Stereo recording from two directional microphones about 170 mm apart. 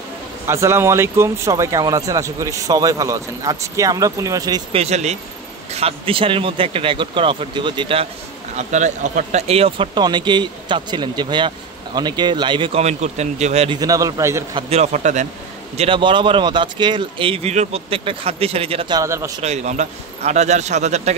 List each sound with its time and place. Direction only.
0.5 s speech: 15° right (ahead or behind)
4.7 s speech: 40° right (ahead or behind)
8.5 s speech: 45° right (ahead or behind)
13.7 s speech: 20° right (ahead or behind)
14.5 s speech: 40° right (ahead or behind)
15.8 s speech: 30° right (ahead or behind)
18.9 s speech: 20° right (ahead or behind)
19.4 s a man's voice: 40° right (ahead or behind)